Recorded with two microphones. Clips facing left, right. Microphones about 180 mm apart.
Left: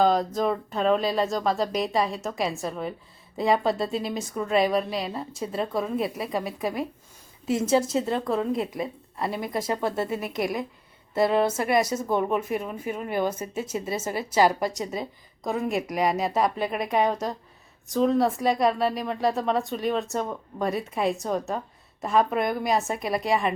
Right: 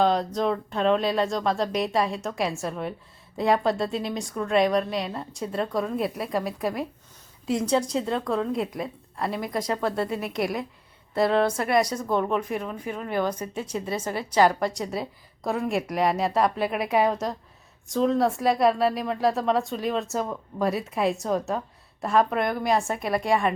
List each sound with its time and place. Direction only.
0.0 s a woman's voice: centre (ahead or behind)
11.9 s speech: 25° left (ahead or behind)
12.1 s a woman's voice: 5° left (ahead or behind)